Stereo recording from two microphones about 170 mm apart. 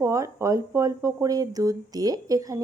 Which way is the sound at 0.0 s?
15° right (ahead or behind).